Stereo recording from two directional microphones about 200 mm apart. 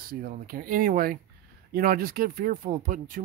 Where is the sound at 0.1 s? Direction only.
45° right (ahead or behind).